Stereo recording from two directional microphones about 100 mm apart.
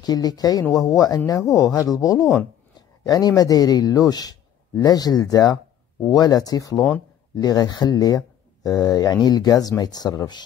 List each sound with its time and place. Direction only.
0.0 s speech: 40° left (ahead or behind)